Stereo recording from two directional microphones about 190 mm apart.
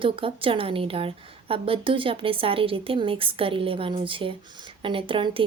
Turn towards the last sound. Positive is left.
turn(degrees=-25)  # may be behind; listen again after turning